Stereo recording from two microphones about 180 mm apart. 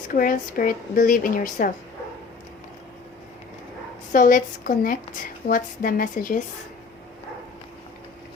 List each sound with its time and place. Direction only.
0.1 s speech: 50° left (ahead or behind)
4.1 s speech: 50° left (ahead or behind)